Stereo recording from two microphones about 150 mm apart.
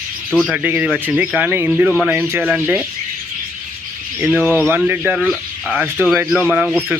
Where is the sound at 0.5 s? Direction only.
10° right (ahead or behind).